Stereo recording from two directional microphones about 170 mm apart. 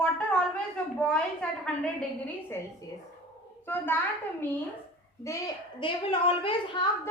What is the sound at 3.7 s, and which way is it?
Speech, 10° left (ahead or behind).